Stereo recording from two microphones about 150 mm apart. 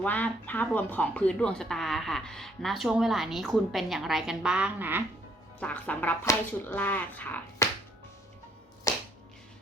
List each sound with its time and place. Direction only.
0.0 s speech: 10° left (ahead or behind); by 5.0 s 15° right (ahead or behind)
5.5 s speech: 10° left (ahead or behind)
8.9 s finger snapping: 20° left (ahead or behind)